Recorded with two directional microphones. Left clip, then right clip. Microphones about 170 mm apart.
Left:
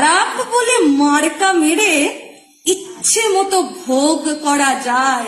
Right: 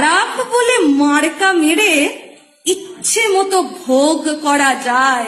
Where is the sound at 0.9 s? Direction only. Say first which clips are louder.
Even; 30° left (ahead or behind).